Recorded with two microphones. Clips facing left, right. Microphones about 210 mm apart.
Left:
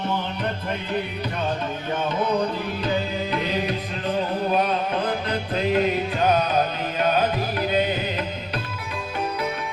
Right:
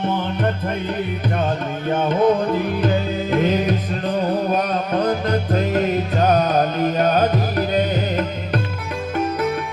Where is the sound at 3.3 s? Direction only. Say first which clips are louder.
Right 9 dB; 45° right (ahead or behind).